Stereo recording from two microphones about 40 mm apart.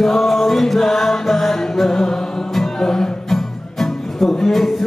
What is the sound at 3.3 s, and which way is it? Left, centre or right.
Music, centre.